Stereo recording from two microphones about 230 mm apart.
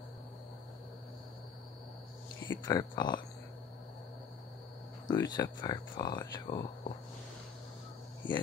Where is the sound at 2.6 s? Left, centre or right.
Centre.